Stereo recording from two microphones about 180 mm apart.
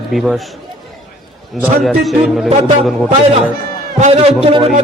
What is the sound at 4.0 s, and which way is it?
Speech, 35° right (ahead or behind).